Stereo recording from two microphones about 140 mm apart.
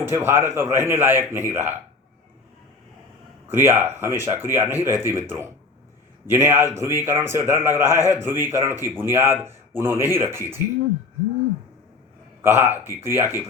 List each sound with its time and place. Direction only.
0.0 s a man's voice: 20° right (ahead or behind)
3.4 s a man's voice: 15° right (ahead or behind)
12.4 s a man's voice: 15° right (ahead or behind)